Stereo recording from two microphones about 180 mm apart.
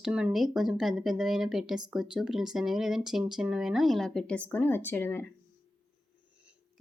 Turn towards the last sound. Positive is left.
turn(degrees=10)  # may be behind; listen again after turning